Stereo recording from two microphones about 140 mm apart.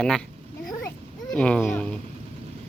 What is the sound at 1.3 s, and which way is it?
Speech, 10° left (ahead or behind).